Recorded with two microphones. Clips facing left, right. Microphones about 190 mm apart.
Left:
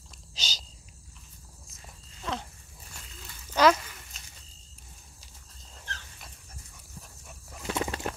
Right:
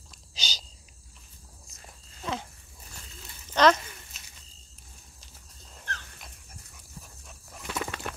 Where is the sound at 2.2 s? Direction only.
5° right (ahead or behind).